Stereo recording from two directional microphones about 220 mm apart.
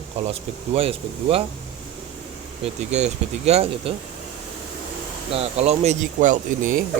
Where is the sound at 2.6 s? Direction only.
30° right (ahead or behind).